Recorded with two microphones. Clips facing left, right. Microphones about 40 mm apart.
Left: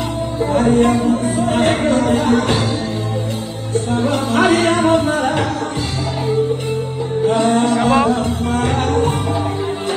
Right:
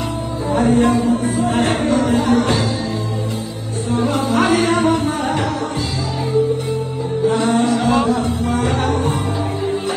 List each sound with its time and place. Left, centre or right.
0.6 s music: left
3.9 s music: left
7.2 s music: left